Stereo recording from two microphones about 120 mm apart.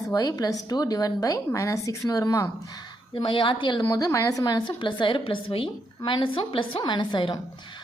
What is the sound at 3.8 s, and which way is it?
A woman's voice, 30° left (ahead or behind).